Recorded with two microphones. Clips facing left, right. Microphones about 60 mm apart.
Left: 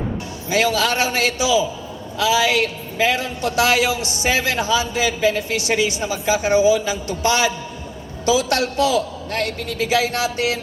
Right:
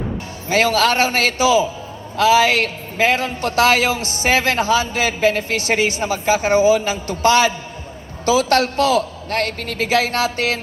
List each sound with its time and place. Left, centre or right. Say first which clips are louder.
0.4 s a man's voice: right 3 dB; right